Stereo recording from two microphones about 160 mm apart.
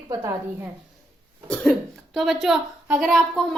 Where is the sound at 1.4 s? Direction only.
5° left (ahead or behind).